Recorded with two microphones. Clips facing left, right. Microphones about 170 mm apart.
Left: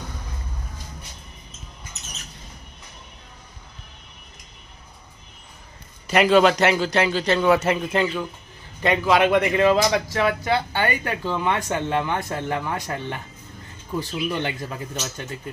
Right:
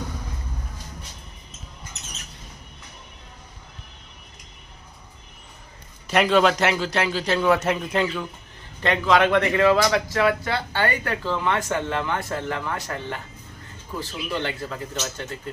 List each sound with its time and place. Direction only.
6.0 s a man's voice: centre (ahead or behind)